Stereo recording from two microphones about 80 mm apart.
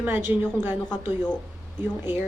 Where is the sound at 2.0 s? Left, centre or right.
Right.